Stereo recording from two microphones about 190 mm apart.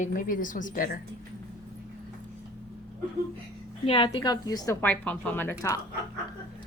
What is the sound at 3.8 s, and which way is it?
Speech, 30° left (ahead or behind).